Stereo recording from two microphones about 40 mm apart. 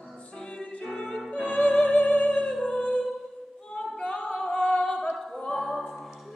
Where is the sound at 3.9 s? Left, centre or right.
Left.